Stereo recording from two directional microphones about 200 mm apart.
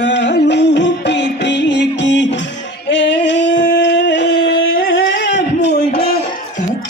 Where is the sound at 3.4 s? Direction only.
60° left (ahead or behind).